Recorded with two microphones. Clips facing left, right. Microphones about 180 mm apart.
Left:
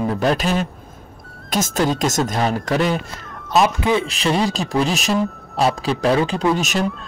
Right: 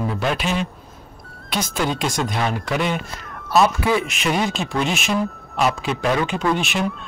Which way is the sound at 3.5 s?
20° left (ahead or behind).